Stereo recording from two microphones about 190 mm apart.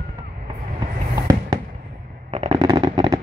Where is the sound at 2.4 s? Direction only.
25° right (ahead or behind).